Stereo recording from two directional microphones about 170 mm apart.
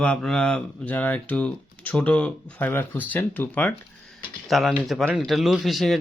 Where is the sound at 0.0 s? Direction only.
5° left (ahead or behind).